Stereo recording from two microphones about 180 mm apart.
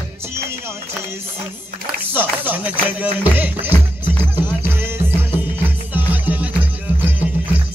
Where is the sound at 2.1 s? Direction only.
10° right (ahead or behind).